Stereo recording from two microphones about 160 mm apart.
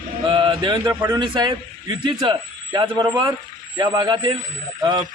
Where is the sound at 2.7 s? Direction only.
25° right (ahead or behind).